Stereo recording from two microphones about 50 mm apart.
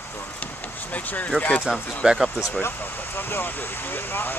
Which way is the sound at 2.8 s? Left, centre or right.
Left.